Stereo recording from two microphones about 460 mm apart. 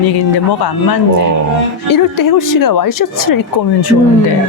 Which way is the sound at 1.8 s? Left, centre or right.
Left.